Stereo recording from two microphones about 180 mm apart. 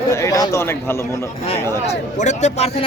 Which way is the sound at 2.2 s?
40° left (ahead or behind).